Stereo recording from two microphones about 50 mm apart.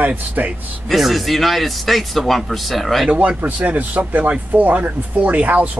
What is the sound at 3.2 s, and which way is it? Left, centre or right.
Speech, right.